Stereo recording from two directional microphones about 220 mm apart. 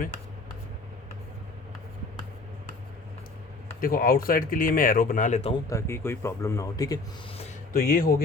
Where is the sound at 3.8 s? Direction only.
40° left (ahead or behind).